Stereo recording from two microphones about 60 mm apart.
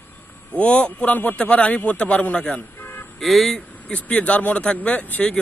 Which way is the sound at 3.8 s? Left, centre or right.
Left.